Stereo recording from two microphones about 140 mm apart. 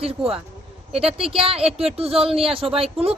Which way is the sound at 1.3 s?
40° right (ahead or behind).